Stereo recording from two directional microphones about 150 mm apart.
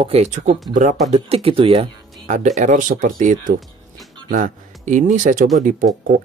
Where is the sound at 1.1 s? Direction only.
40° right (ahead or behind).